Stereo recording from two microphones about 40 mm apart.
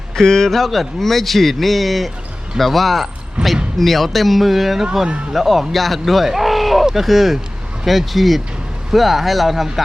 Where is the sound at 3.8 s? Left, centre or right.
Centre.